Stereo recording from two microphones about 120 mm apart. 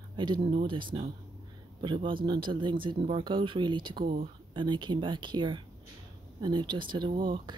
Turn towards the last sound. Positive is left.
turn(degrees=-40)  # may be behind; listen again after turning